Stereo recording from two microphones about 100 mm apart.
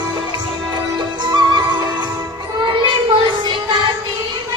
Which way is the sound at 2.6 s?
55° right (ahead or behind).